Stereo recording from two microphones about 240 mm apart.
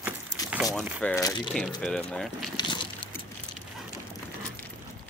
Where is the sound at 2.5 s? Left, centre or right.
Centre.